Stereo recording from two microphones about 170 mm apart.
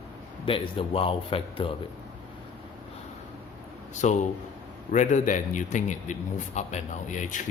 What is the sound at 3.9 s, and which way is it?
A man's voice, 45° left (ahead or behind).